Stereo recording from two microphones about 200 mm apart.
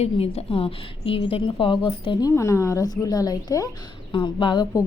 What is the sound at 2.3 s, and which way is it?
Speech, 15° left (ahead or behind).